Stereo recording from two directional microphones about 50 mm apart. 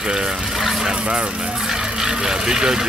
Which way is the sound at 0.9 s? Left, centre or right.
Centre.